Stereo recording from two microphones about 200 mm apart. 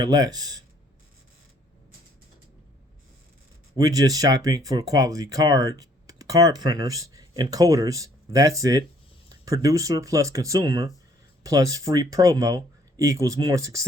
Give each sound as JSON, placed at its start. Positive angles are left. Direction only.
{"t": 0.0, "sound": "speech", "side_deg": -20}
{"t": 3.8, "sound": "speech", "side_deg": -20}